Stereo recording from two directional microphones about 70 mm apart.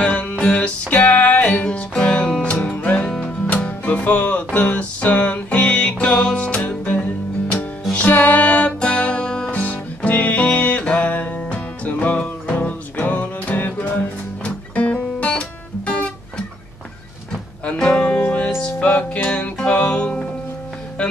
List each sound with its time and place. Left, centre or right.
0.0 s music: centre
17.6 s music: centre